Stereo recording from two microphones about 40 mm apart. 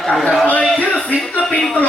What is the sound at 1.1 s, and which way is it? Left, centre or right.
Speech, left.